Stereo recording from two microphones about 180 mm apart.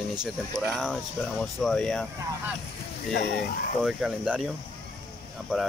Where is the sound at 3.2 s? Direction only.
60° left (ahead or behind).